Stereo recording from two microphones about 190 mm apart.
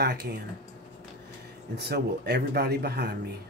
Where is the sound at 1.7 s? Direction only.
60° right (ahead or behind).